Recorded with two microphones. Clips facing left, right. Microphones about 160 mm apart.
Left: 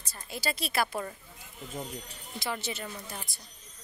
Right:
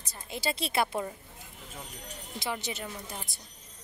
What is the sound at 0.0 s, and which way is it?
A woman's voice, 20° right (ahead or behind).